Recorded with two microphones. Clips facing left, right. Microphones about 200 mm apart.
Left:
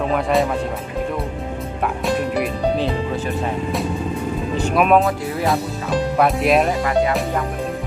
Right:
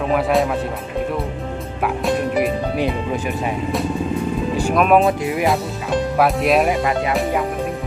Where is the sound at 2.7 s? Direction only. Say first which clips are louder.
Right 1 dB; 15° right (ahead or behind).